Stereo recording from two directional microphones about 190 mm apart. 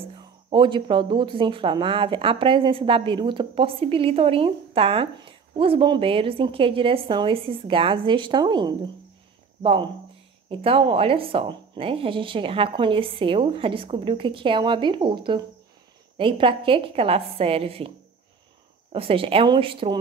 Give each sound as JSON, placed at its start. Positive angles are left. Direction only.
{"t": 0.1, "sound": "speech", "side_deg": -25}